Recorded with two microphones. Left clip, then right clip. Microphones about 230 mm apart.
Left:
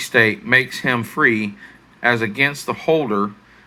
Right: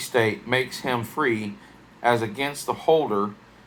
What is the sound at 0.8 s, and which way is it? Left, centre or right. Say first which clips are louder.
Speech: left 7 dB; left.